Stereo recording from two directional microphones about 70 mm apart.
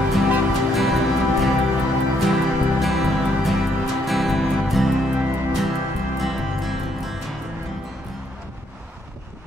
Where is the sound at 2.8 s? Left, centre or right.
Centre.